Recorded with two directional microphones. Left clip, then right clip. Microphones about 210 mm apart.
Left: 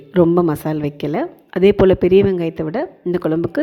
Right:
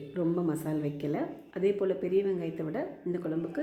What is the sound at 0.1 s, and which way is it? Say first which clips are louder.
A woman's voice: left 16 dB; 45° left (ahead or behind).